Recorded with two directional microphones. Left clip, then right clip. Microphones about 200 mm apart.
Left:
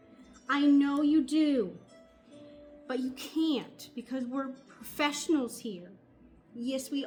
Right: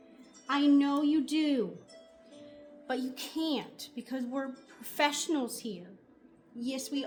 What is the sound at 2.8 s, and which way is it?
A woman's voice, 20° right (ahead or behind).